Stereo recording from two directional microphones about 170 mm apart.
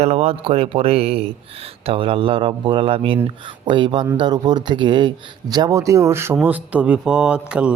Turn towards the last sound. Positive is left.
turn(degrees=-5)  # may be behind; listen again after turning